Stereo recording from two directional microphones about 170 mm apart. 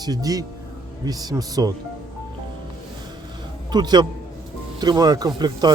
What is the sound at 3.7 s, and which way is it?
Speech, 25° right (ahead or behind).